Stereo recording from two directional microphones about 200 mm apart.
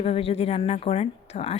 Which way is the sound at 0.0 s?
30° left (ahead or behind).